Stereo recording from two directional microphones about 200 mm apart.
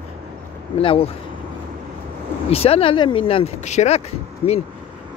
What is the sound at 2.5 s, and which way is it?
Speech, 30° left (ahead or behind).